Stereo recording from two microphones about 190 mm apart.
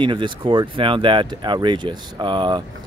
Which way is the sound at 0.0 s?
25° right (ahead or behind).